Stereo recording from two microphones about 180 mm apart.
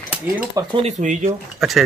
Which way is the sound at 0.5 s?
30° right (ahead or behind).